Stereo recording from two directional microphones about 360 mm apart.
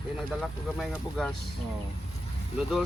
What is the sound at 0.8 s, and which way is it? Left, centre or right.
Speech, centre.